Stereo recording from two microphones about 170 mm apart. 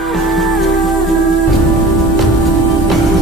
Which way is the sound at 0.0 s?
Centre (ahead or behind).